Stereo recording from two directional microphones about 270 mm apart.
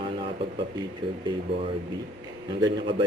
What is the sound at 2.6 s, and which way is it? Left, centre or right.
Speech, centre.